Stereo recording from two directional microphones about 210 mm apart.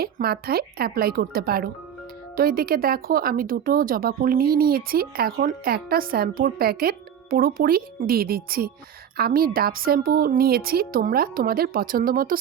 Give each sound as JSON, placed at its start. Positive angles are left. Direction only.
{"t": 0.0, "sound": "speech", "side_deg": -45}